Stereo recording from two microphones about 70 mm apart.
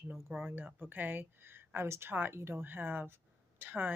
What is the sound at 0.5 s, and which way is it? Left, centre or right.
Speech, right.